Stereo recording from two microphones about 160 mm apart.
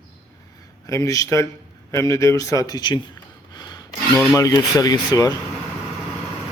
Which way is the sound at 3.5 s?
25° left (ahead or behind).